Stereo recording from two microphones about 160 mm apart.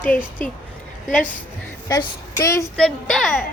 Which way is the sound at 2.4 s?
20° left (ahead or behind).